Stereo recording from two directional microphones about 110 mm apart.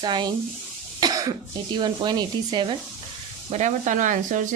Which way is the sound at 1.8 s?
40° right (ahead or behind).